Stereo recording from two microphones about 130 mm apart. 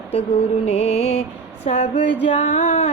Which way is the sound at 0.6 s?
55° left (ahead or behind).